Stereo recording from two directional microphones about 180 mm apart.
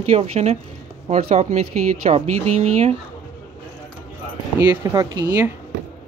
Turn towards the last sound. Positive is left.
turn(degrees=-15)  # may be behind; listen again after turning